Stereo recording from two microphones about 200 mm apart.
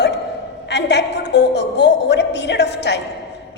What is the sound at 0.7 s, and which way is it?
A woman's voice, 60° left (ahead or behind).